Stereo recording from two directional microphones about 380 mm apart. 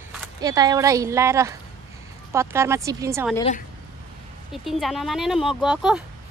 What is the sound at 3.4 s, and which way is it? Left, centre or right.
Speech, centre.